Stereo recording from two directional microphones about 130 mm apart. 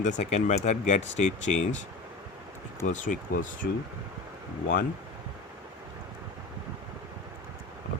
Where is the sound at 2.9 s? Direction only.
75° left (ahead or behind); by 3.5 s 90° left.